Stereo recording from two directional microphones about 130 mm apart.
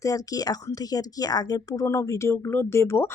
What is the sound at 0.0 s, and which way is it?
Speech, 30° left (ahead or behind).